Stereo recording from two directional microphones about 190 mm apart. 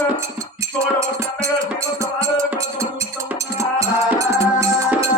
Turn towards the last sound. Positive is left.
turn(degrees=-15)  # may be behind; listen again after turning